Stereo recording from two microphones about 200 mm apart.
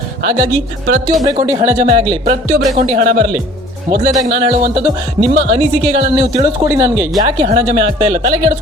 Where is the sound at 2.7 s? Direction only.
35° right (ahead or behind).